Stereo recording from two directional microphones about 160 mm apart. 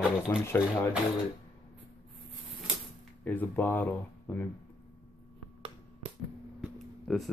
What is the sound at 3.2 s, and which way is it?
Speech, 10° left (ahead or behind).